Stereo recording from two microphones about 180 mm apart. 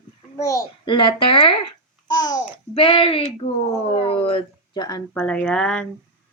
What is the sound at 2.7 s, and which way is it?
Speech, 30° left (ahead or behind).